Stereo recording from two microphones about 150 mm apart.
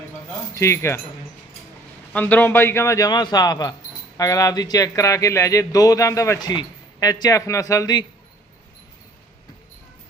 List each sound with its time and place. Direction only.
0.5 s speech: 20° left (ahead or behind)
2.1 s speech: 15° left (ahead or behind)